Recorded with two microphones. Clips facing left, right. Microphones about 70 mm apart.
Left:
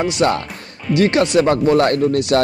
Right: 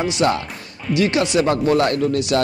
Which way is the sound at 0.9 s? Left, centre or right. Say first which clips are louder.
Left 3 dB; left.